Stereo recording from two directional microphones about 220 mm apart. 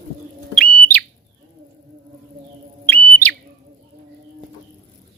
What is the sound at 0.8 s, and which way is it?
Bird, 5° left (ahead or behind).